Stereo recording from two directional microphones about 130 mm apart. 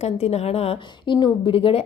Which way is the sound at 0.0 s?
55° left (ahead or behind).